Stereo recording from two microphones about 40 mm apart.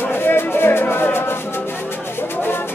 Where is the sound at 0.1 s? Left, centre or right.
Left.